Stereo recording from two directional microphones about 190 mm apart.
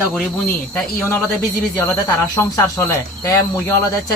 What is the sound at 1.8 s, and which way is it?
Speech, 15° left (ahead or behind).